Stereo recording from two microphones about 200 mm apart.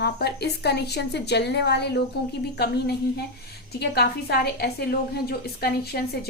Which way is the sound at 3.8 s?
55° left (ahead or behind).